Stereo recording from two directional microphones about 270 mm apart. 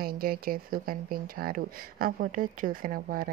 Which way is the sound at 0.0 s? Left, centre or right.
Right.